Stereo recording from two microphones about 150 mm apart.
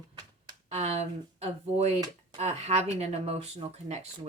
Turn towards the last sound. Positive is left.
turn(degrees=-45)  # may be behind; listen again after turning